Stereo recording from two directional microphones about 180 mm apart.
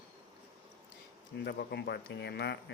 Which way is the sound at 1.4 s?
65° left (ahead or behind).